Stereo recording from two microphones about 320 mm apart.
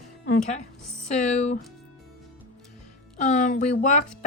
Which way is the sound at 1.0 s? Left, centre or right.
Left.